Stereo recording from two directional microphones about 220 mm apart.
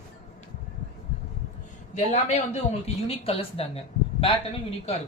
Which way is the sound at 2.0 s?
30° left (ahead or behind).